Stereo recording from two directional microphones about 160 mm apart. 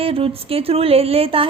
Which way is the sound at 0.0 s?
35° right (ahead or behind).